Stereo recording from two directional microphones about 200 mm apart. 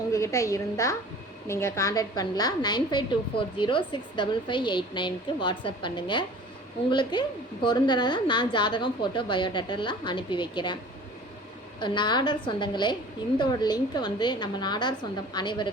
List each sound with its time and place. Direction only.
0.1 s a woman's voice: 15° left (ahead or behind)
11.8 s a woman's voice: 25° left (ahead or behind)